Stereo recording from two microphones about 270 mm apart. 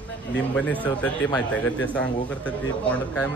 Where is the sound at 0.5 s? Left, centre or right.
Centre.